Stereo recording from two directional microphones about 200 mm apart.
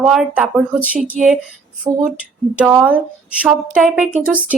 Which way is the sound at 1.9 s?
20° right (ahead or behind).